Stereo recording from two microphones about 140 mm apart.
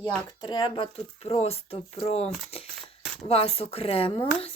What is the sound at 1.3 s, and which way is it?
Speech, 45° left (ahead or behind).